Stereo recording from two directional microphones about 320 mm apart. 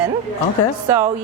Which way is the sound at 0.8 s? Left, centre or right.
Right.